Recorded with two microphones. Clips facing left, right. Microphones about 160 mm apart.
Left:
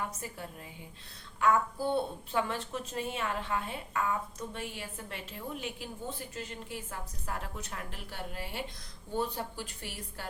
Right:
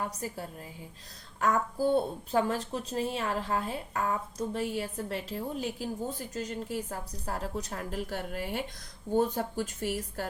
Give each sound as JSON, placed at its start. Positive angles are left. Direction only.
{"t": 0.1, "sound": "a woman's voice", "side_deg": -35}